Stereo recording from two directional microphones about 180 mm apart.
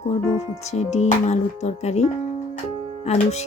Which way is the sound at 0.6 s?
40° left (ahead or behind).